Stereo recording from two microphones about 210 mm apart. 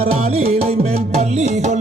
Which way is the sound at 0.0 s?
30° right (ahead or behind).